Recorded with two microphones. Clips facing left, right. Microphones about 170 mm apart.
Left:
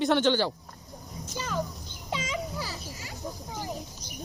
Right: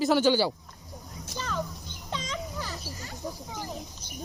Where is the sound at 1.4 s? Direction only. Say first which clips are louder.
Left 1 dB; 15° left (ahead or behind).